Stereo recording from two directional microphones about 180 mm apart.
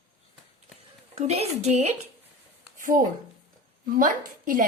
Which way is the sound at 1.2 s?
35° right (ahead or behind).